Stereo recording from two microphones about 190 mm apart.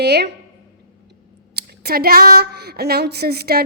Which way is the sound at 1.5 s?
55° right (ahead or behind).